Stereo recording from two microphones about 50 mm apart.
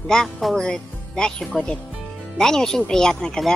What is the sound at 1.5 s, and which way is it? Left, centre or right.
Speech, centre.